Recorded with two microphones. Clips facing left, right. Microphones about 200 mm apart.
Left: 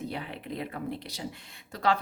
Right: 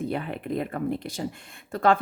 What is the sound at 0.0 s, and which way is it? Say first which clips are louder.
Speech: right 7 dB; 50° right (ahead or behind).